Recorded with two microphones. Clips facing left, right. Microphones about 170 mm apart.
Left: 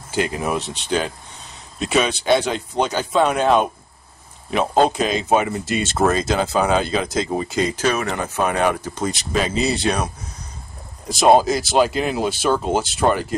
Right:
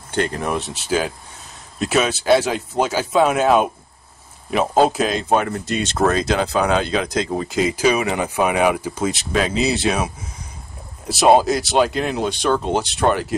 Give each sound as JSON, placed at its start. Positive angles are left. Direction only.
{"t": 0.1, "sound": "speech", "side_deg": 5}